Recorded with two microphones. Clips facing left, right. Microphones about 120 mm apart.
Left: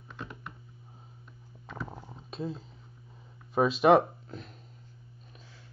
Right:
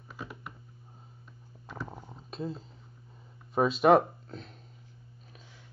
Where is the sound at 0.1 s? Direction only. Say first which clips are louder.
Even; 5° right (ahead or behind).